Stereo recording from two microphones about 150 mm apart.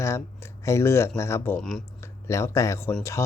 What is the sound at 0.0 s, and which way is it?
Speech, 20° left (ahead or behind).